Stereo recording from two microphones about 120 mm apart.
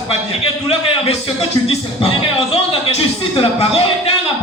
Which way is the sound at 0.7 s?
55° left (ahead or behind).